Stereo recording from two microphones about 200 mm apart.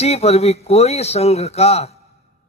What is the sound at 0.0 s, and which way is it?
Speech, 30° left (ahead or behind).